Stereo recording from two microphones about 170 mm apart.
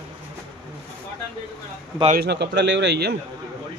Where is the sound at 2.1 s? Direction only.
75° right (ahead or behind).